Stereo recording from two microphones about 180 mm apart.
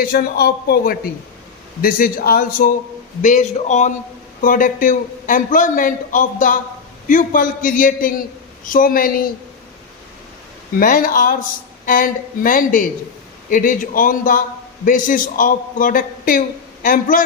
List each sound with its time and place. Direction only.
0.0 s a man's voice: 60° left (ahead or behind)
10.8 s a man's voice: 50° left (ahead or behind)